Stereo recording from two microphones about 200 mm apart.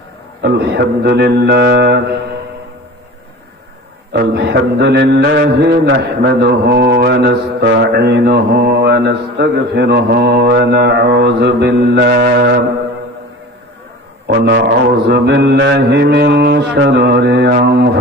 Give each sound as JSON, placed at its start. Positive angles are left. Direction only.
{"t": 0.4, "sound": "mantra", "side_deg": -55}
{"t": 4.1, "sound": "mantra", "side_deg": -55}
{"t": 14.3, "sound": "mantra", "side_deg": -55}